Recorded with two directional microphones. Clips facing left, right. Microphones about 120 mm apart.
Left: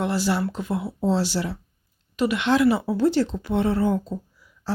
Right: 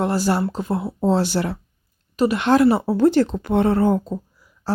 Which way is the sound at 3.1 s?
55° right (ahead or behind).